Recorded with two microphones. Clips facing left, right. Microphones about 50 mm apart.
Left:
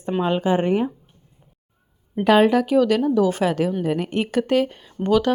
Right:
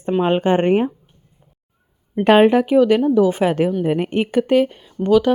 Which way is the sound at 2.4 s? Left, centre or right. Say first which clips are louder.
Right 4 dB; right.